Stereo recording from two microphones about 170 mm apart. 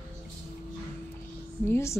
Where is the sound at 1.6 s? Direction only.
15° left (ahead or behind).